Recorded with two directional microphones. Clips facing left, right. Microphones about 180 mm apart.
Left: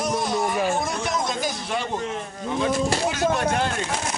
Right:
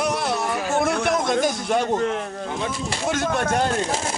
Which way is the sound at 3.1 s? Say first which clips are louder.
Even; 50° right (ahead or behind).